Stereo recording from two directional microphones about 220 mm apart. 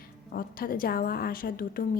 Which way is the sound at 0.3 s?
40° left (ahead or behind).